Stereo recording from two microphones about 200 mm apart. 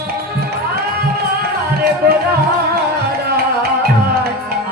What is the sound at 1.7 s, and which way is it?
Music, 50° right (ahead or behind).